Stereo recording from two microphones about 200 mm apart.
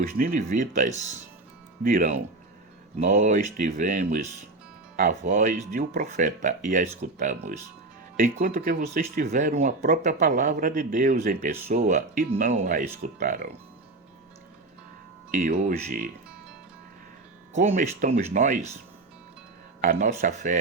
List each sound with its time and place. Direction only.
0.2 s speech: 40° right (ahead or behind)
15.3 s speech: 40° right (ahead or behind)
17.5 s speech: 35° right (ahead or behind)
19.8 s speech: 40° right (ahead or behind)